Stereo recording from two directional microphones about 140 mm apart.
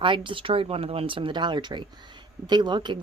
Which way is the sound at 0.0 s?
35° right (ahead or behind).